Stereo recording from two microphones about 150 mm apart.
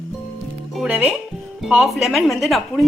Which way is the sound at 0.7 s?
10° right (ahead or behind).